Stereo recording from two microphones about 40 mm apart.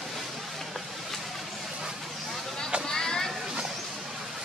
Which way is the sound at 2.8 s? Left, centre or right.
Centre.